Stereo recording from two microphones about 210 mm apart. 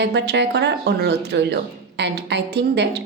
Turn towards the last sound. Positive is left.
turn(degrees=-55)  # may be behind; listen again after turning